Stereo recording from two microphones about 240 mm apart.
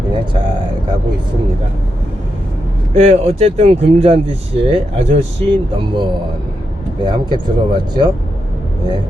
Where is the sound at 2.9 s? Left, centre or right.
Right.